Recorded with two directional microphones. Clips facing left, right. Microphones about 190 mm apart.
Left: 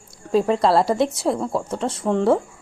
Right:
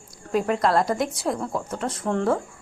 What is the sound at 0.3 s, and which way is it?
Speech, 30° left (ahead or behind).